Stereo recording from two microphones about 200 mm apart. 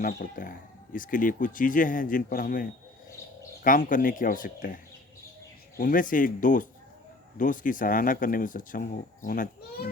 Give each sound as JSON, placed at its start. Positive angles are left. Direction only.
{"t": 0.1, "sound": "a man's voice", "side_deg": 45}